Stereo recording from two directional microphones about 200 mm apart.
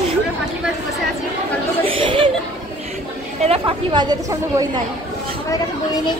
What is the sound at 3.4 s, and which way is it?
A woman's voice, 25° right (ahead or behind).